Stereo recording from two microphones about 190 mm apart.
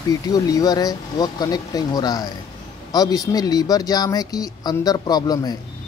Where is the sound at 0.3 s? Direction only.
20° left (ahead or behind).